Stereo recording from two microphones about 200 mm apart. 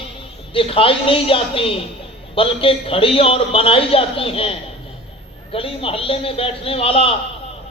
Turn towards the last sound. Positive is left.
turn(degrees=30)  # may be behind; listen again after turning